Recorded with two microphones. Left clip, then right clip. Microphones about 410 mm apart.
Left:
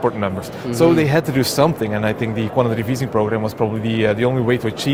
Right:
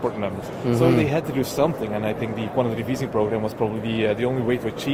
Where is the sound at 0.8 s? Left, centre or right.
Left.